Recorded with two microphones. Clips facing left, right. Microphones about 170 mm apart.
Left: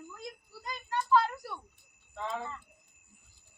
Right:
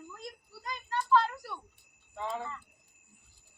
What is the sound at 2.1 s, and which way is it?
Speech, 10° right (ahead or behind).